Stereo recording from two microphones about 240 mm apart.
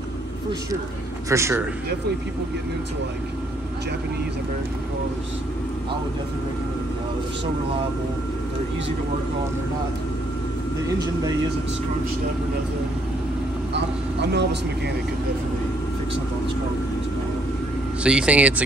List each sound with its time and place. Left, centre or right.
1.3 s speech: centre
13.7 s speech: right
18.0 s speech: centre